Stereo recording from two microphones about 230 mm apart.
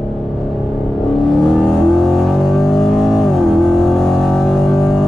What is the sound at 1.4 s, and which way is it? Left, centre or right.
Vehicle, centre.